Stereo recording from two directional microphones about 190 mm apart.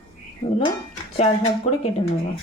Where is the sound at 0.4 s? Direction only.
30° left (ahead or behind).